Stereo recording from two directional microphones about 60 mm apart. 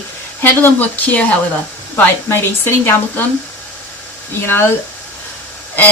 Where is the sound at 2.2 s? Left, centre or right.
Left.